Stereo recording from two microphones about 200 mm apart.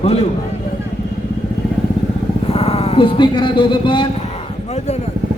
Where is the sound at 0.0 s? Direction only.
30° left (ahead or behind).